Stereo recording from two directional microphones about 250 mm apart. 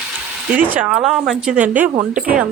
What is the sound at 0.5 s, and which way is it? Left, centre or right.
Speech, centre.